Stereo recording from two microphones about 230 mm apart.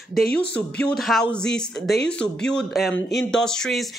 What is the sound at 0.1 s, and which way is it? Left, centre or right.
Speech, centre.